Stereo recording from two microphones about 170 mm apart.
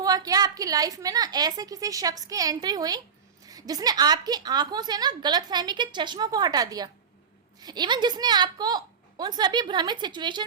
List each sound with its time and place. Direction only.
0.0 s a woman's voice: 20° right (ahead or behind)